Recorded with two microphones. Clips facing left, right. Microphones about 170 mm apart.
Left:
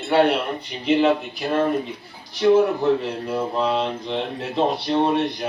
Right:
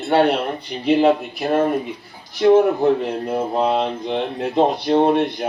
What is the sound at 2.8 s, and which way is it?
Speech, 45° right (ahead or behind).